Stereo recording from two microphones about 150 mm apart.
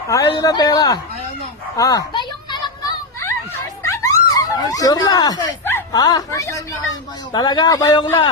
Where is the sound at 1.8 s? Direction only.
25° left (ahead or behind).